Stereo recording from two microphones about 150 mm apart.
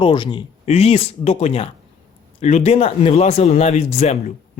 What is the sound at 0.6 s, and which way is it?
Speech, 45° left (ahead or behind).